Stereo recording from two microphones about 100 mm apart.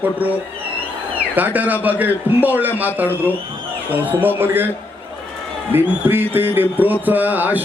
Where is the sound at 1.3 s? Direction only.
15° right (ahead or behind).